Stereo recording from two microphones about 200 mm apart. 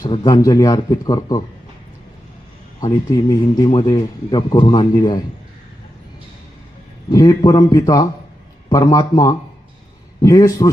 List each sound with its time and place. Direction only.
0.0 s speech: 20° left (ahead or behind)
2.8 s speech: 15° left (ahead or behind)
7.1 s a man's voice: 20° left (ahead or behind)